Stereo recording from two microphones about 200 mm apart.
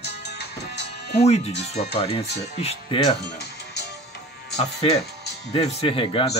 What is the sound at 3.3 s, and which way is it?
Music, 55° left (ahead or behind).